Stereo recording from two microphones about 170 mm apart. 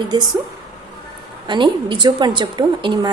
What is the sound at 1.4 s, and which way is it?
A woman's voice, 25° right (ahead or behind).